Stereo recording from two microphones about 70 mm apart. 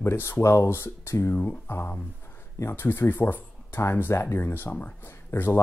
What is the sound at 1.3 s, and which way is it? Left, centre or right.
Speech, left.